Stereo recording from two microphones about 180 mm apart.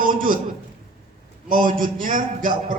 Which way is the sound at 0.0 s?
50° right (ahead or behind).